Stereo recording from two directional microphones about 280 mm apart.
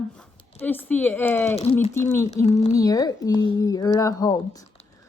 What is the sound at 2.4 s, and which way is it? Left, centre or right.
Speech, left.